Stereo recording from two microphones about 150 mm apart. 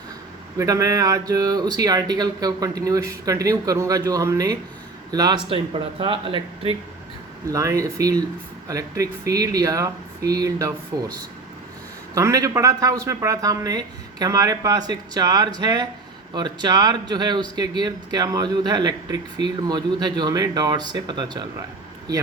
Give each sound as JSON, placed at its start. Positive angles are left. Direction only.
{"t": 0.6, "sound": "speech", "side_deg": -20}
{"t": 7.4, "sound": "speech", "side_deg": -20}
{"t": 12.1, "sound": "speech", "side_deg": -25}